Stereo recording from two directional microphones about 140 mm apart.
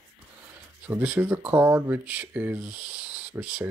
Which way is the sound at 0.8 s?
15° right (ahead or behind).